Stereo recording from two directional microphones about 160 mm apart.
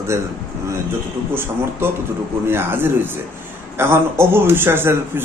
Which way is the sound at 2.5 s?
15° right (ahead or behind).